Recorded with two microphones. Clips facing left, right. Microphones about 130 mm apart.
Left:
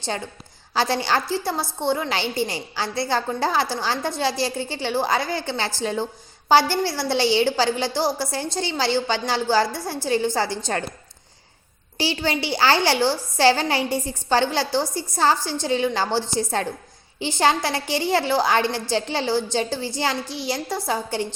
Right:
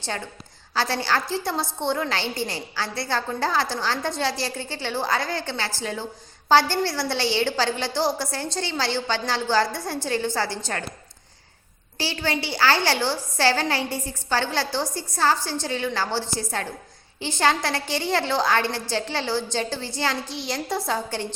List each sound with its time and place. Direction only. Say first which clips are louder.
0.7 s a woman's voice: left 3 dB; 15° left (ahead or behind)
1.3 s a woman's voice: left 2 dB; 5° left (ahead or behind); by 6.1 s 25° left (ahead or behind)
6.5 s a woman's voice: left 1 dB; 10° left (ahead or behind)
11.9 s a woman's voice: left 3 dB; 15° left (ahead or behind)